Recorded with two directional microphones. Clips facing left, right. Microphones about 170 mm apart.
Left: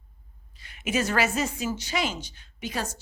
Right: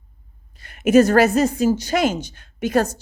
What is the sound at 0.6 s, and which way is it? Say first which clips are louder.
A woman's voice: right 14 dB; 50° right (ahead or behind).